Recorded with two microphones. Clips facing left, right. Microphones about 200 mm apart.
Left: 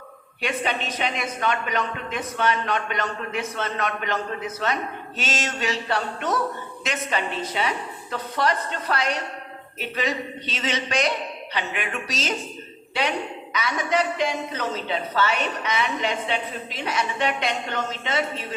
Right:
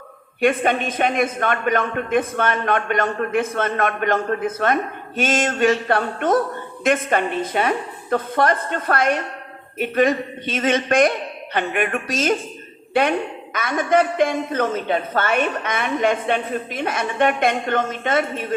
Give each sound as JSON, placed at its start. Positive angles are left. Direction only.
{"t": 0.4, "sound": "a man's voice", "side_deg": -50}